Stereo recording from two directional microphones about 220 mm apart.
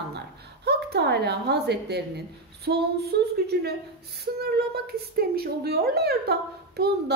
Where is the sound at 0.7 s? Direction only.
50° right (ahead or behind).